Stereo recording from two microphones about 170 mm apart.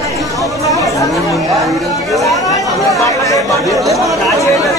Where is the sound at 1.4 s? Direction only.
Centre (ahead or behind).